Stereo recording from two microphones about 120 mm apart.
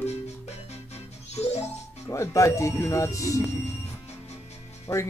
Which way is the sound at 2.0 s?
25° left (ahead or behind).